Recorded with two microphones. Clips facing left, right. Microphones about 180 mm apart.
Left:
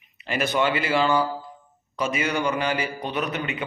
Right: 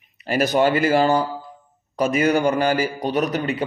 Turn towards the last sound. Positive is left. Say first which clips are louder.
# right 6 dB
turn(degrees=-40)  # may be behind; listen again after turning